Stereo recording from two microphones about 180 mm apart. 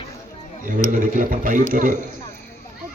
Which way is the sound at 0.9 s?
50° right (ahead or behind).